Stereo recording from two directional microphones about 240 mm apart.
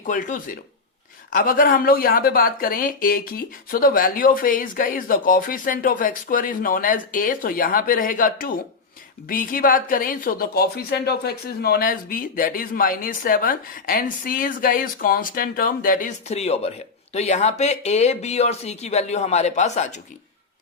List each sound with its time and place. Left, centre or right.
0.0 s speech: left